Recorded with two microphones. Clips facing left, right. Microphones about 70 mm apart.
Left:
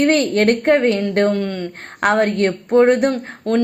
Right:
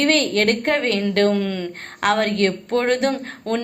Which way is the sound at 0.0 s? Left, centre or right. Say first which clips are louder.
Left 3 dB; left.